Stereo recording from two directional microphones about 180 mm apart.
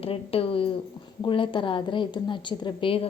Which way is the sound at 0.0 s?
30° left (ahead or behind).